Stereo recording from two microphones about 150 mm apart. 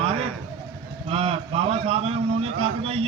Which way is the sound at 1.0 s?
40° right (ahead or behind).